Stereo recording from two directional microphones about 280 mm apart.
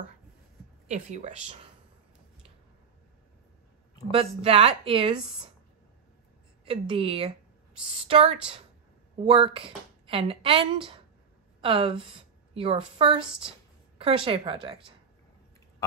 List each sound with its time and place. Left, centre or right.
0.8 s speech: right
4.1 s speech: right
6.7 s a woman's voice: centre